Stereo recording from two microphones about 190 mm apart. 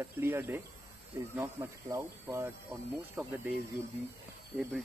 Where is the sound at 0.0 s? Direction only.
10° right (ahead or behind).